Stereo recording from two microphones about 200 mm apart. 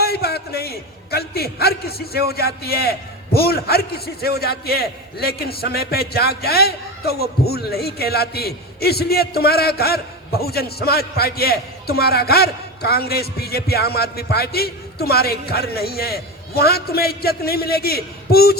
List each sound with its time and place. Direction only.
0.0 s a man's voice: 50° left (ahead or behind)